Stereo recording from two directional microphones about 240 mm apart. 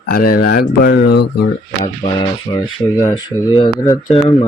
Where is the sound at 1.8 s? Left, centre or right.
Centre.